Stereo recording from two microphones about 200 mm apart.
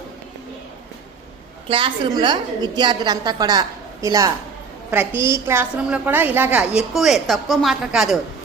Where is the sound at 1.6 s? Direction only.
25° right (ahead or behind).